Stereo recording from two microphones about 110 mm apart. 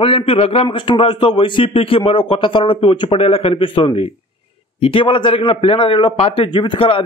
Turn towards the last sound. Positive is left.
turn(degrees=55)  # may be behind; listen again after turning